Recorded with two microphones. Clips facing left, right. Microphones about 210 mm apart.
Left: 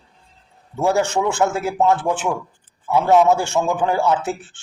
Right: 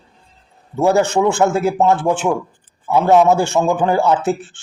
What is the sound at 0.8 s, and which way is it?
A man's voice, 35° right (ahead or behind).